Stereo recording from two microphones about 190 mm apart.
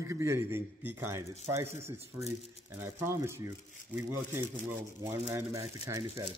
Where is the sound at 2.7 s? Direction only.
15° right (ahead or behind).